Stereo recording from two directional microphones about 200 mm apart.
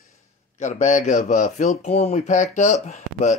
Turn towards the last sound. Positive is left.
turn(degrees=35)  # may be behind; listen again after turning